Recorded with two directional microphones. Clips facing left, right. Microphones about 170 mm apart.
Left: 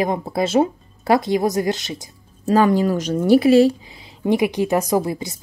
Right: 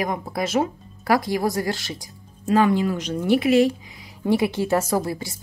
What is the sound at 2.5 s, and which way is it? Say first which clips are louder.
Speech: left 3 dB; 40° left (ahead or behind).